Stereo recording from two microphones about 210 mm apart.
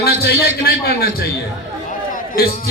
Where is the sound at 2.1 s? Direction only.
45° left (ahead or behind).